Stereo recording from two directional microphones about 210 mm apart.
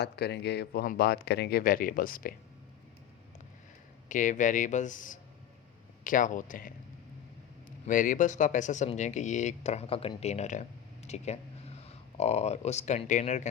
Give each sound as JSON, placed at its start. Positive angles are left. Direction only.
{"t": 0.0, "sound": "speech", "side_deg": 50}
{"t": 4.1, "sound": "speech", "side_deg": 35}
{"t": 7.9, "sound": "speech", "side_deg": 40}